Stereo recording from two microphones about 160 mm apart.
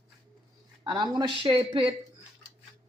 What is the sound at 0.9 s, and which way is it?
Speech, 30° right (ahead or behind).